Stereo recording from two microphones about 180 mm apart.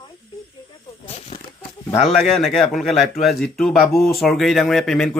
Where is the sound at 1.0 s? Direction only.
35° left (ahead or behind).